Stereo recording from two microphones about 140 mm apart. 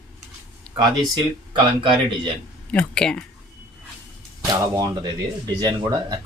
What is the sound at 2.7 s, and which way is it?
Speech, 5° left (ahead or behind).